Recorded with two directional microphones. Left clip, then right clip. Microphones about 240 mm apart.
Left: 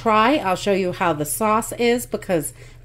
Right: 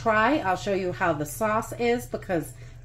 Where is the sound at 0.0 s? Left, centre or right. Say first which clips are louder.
Left 5 dB; left.